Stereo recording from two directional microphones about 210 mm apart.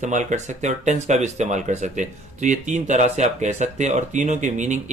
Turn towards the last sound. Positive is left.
turn(degrees=-35)  # may be behind; listen again after turning